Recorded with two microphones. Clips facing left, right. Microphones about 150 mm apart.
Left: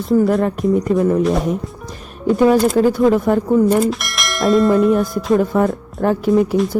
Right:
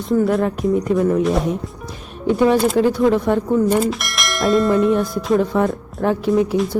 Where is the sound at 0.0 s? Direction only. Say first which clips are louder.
Left 2 dB; 5° left (ahead or behind).